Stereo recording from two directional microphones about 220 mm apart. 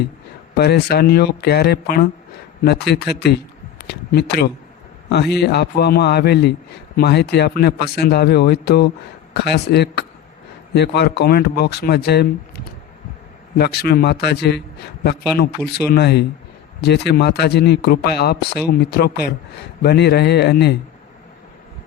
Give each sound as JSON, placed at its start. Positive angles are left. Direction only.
{"t": 0.5, "sound": "a man's voice", "side_deg": 45}
{"t": 13.6, "sound": "a man's voice", "side_deg": 45}